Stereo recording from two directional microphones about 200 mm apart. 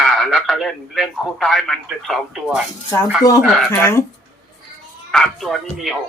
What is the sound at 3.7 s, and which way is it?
Speech, 15° left (ahead or behind).